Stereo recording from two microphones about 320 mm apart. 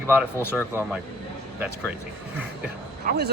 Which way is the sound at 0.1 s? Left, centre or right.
Centre.